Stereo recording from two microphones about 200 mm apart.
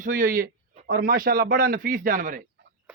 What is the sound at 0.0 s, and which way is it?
A man's voice, 45° right (ahead or behind).